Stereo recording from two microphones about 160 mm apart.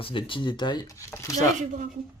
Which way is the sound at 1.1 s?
20° left (ahead or behind).